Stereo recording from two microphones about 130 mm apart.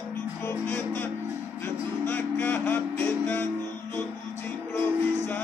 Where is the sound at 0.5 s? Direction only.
15° left (ahead or behind).